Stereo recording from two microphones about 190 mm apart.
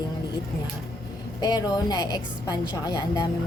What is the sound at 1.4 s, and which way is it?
A woman's voice, 20° left (ahead or behind).